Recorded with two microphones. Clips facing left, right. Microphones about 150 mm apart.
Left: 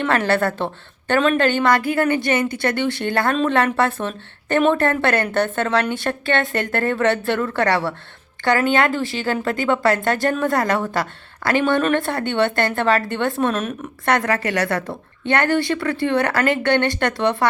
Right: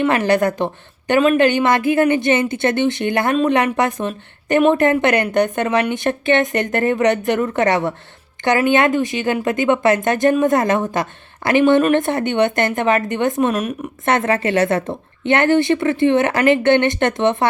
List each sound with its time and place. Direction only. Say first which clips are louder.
0.0 s a woman's voice: right 3 dB; 15° right (ahead or behind)
14.1 s a woman's voice: right 3 dB; 25° right (ahead or behind)